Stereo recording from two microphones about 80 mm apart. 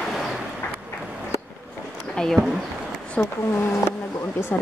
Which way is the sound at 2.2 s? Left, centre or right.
Centre.